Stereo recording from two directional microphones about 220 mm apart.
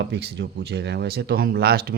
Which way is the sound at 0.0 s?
50° right (ahead or behind).